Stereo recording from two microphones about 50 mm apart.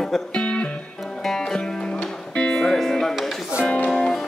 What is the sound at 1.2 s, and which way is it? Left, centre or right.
Music, centre.